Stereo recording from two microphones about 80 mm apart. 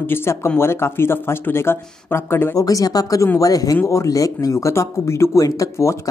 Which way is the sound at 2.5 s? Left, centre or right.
Left.